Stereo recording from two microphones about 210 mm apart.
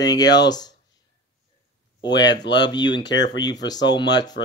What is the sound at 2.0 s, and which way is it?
Speech, 20° left (ahead or behind).